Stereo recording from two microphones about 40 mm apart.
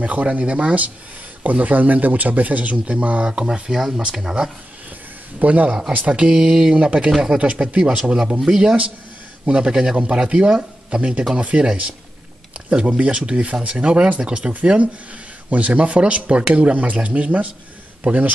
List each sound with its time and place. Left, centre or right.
0.0 s speech: right
2.8 s speech: right
5.4 s speech: right
7.1 s speech: centre; by 18.3 s right